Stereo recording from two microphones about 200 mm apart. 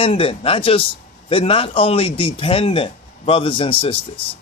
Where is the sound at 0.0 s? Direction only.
30° left (ahead or behind).